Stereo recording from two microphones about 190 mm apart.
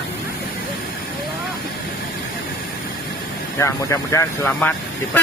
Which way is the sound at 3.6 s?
15° left (ahead or behind).